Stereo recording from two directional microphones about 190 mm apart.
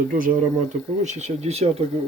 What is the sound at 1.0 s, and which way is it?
Speech, 35° right (ahead or behind).